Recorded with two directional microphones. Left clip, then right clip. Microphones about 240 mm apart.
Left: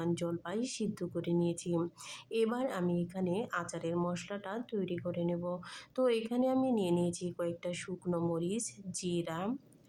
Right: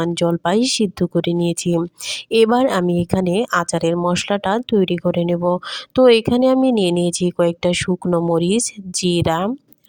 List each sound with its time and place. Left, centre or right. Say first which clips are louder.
0.0 s speech: right 18 dB; right